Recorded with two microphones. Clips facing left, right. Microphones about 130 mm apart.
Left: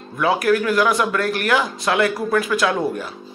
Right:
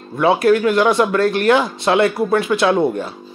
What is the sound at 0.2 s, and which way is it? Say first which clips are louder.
Speech: right 4 dB; 25° right (ahead or behind).